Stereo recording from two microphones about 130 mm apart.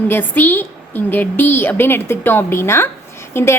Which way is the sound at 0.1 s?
15° left (ahead or behind).